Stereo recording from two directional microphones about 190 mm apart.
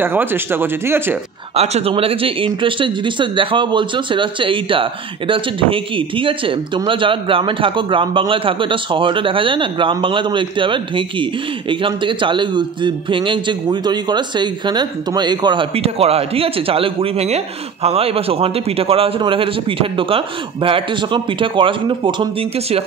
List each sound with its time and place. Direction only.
0.0 s speech: 10° right (ahead or behind)
1.5 s speech: 35° right (ahead or behind)